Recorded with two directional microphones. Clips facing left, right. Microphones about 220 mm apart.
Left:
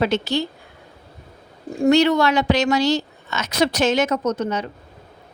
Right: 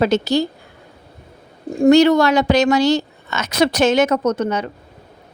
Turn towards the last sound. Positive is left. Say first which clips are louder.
# right 3 dB
turn(degrees=-65)  # may be behind; listen again after turning